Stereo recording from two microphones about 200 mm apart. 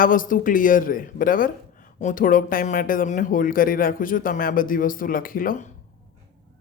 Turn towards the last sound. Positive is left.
turn(degrees=45)  # may be behind; listen again after turning